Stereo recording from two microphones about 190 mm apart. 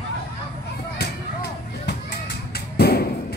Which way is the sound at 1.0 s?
60° left (ahead or behind).